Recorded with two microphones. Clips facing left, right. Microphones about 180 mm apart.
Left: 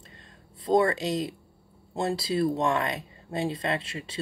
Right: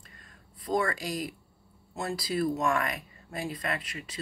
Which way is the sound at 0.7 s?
25° left (ahead or behind).